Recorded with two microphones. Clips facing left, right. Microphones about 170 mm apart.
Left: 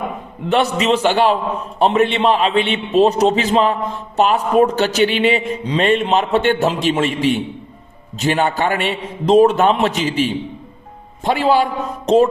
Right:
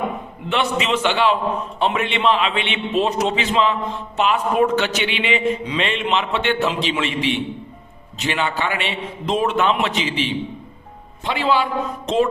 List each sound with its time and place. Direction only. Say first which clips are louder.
0.4 s a man's voice: left 5 dB; 40° left (ahead or behind)